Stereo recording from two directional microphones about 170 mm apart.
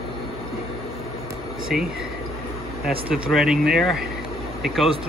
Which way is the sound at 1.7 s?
5° right (ahead or behind).